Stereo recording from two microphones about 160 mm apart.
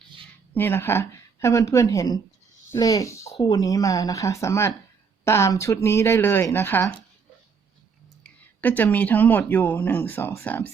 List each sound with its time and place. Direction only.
0.5 s speech: 15° left (ahead or behind)
8.2 s speech: 10° left (ahead or behind)